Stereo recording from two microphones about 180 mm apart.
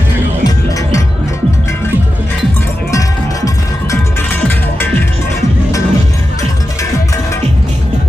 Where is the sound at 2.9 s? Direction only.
15° left (ahead or behind).